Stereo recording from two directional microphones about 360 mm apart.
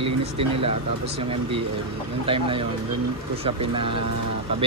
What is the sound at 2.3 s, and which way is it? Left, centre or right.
Speech, centre.